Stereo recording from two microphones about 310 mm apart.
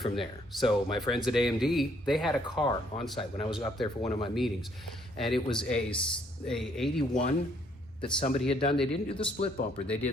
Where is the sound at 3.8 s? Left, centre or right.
Centre.